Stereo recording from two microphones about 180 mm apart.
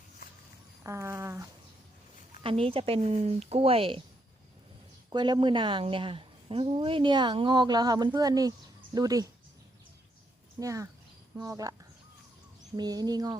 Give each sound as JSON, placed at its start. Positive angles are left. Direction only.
{"t": 0.9, "sound": "a sound", "side_deg": -15}
{"t": 2.4, "sound": "speech", "side_deg": -30}
{"t": 5.1, "sound": "a woman's voice", "side_deg": -25}
{"t": 10.6, "sound": "a woman's voice", "side_deg": -20}
{"t": 12.7, "sound": "a woman's voice", "side_deg": -20}